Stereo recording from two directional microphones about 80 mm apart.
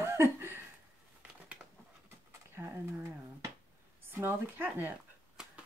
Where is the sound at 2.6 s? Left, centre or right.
Right.